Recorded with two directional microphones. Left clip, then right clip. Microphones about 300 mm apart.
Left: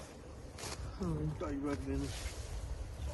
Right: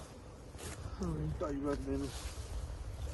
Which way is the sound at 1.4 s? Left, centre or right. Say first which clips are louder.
Right 3 dB; centre.